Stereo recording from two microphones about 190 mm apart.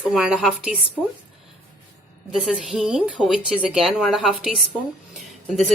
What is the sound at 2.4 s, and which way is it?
Speech, centre (ahead or behind).